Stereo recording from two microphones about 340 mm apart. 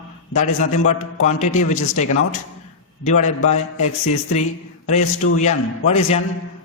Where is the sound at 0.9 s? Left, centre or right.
Centre.